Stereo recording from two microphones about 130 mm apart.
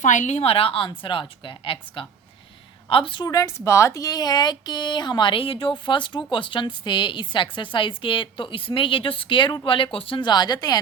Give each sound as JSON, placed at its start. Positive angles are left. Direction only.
{"t": 0.0, "sound": "a woman's voice", "side_deg": 70}
{"t": 3.2, "sound": "a woman's voice", "side_deg": 25}